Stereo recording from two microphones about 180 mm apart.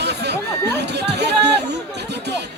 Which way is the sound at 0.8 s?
70° right (ahead or behind).